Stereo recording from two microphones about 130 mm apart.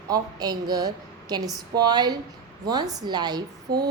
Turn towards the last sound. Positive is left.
turn(degrees=-30)  # may be behind; listen again after turning